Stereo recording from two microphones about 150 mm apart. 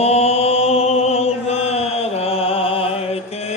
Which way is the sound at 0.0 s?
45° left (ahead or behind).